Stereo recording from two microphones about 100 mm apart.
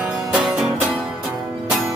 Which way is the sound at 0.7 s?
15° right (ahead or behind).